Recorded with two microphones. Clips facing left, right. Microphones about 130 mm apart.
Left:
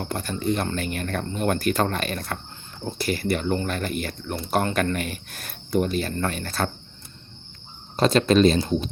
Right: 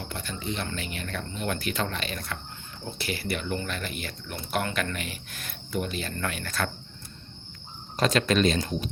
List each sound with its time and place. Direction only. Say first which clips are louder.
0.0 s speech: left 8 dB; 45° left (ahead or behind)
7.9 s speech: left 6 dB; 30° left (ahead or behind)